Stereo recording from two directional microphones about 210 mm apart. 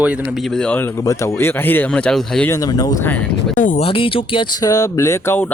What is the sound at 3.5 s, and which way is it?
Speech, 35° left (ahead or behind).